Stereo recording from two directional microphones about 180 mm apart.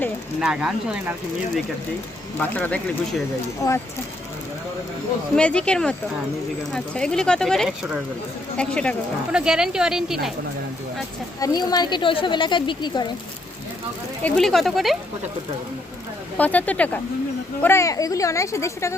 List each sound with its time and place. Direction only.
0.3 s speech: 5° right (ahead or behind)
2.4 s speech: 10° left (ahead or behind)
5.4 s speech: 5° left (ahead or behind)
11.3 s speech: 20° left (ahead or behind)
14.3 s speech: 5° left (ahead or behind)
16.4 s speech: 10° left (ahead or behind)